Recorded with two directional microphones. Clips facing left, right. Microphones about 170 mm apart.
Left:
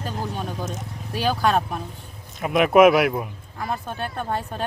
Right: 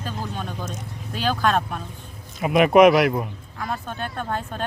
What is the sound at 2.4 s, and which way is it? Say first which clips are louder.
Speech: right 1 dB; centre (ahead or behind).